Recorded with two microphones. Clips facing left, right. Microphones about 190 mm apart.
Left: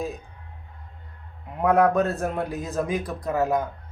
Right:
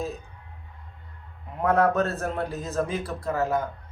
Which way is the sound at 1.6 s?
15° left (ahead or behind).